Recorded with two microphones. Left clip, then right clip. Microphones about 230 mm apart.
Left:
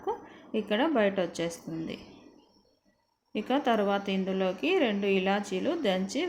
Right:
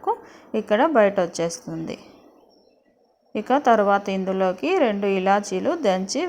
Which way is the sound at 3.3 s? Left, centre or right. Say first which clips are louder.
Right 9 dB; right.